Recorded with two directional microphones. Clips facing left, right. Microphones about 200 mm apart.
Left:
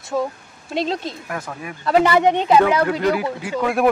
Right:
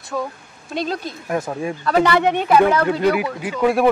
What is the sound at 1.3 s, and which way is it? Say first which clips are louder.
Speech: right 7 dB; 25° right (ahead or behind).